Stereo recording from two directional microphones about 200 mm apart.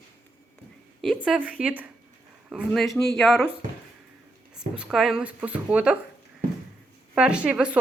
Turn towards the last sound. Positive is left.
turn(degrees=-5)  # may be behind; listen again after turning